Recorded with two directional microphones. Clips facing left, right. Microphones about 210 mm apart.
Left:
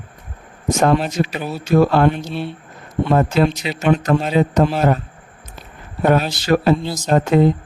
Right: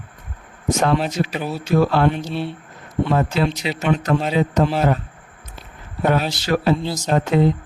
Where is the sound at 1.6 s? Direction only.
50° left (ahead or behind).